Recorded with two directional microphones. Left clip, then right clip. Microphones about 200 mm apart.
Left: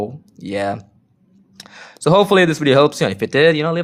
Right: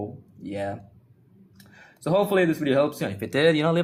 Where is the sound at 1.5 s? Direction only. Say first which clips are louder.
Left 13 dB; 45° left (ahead or behind).